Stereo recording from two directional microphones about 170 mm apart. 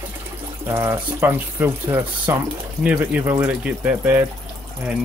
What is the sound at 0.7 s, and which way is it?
Speech, 15° right (ahead or behind).